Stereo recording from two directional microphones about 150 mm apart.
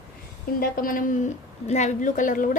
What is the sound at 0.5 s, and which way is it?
Speech, 75° left (ahead or behind).